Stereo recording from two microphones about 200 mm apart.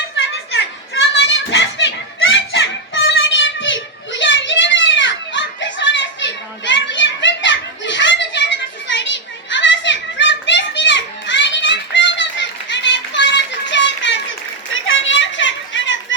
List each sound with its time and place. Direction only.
0.2 s children playing: 65° left (ahead or behind)